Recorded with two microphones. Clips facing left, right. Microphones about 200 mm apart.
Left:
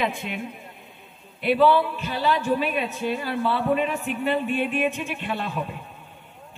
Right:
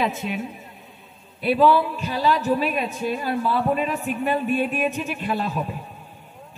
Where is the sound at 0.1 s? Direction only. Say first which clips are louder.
Right 4 dB; 40° right (ahead or behind).